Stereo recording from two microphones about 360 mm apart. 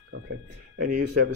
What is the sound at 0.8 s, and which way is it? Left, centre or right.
Speech, right.